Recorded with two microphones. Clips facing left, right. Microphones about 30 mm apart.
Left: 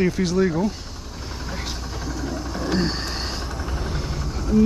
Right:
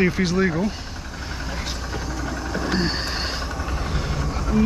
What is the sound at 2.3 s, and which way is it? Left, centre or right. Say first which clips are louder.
Vehicle: right 1 dB; centre.